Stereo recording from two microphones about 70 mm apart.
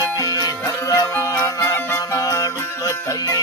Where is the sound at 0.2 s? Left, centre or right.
Left.